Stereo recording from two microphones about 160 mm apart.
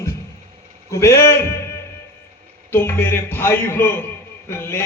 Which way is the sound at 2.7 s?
15° left (ahead or behind).